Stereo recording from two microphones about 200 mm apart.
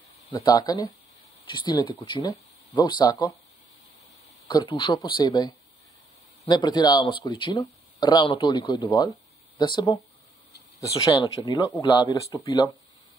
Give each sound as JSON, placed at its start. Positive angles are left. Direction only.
{"t": 0.3, "sound": "speech", "side_deg": 20}
{"t": 4.5, "sound": "speech", "side_deg": 20}
{"t": 11.1, "sound": "speech", "side_deg": 20}